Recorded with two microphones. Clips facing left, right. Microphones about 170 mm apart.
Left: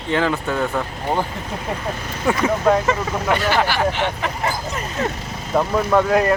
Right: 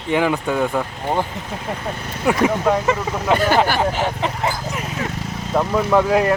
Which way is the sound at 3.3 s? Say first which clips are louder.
Right 4 dB; 50° right (ahead or behind).